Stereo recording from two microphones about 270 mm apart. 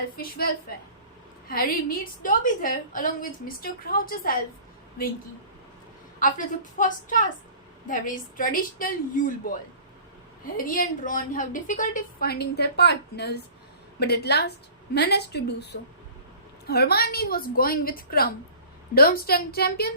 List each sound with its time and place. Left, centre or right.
0.2 s a woman's voice: left
6.1 s a woman's voice: left
10.6 s a woman's voice: left